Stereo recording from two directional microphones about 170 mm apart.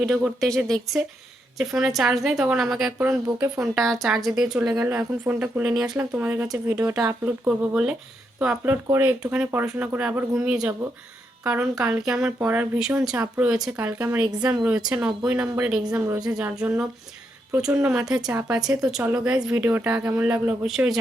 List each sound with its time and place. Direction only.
0.0 s speech: centre (ahead or behind)
3.0 s speech: 15° right (ahead or behind)
4.0 s speech: centre (ahead or behind); by 7.3 s 15° right (ahead or behind)
7.4 s a woman's voice: 5° right (ahead or behind)